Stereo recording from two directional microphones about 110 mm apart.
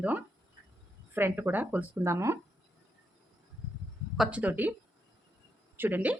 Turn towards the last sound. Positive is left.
turn(degrees=-15)  # may be behind; listen again after turning